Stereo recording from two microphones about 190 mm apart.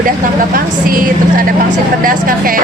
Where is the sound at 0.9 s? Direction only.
45° right (ahead or behind).